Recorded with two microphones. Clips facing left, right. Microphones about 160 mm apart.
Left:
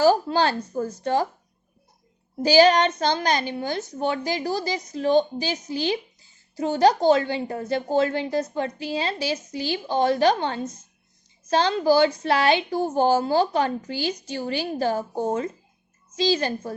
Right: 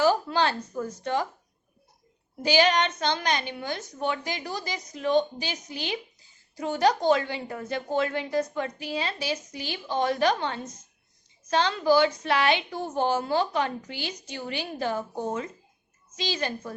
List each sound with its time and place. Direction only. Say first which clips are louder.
0.0 s a woman's voice: left 4 dB; 35° left (ahead or behind)
2.4 s a woman's voice: left 6 dB; 35° left (ahead or behind)